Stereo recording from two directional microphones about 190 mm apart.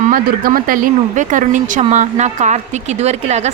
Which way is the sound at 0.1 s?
50° right (ahead or behind).